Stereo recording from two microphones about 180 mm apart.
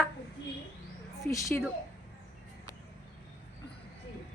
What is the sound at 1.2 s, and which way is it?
Speech, 15° left (ahead or behind).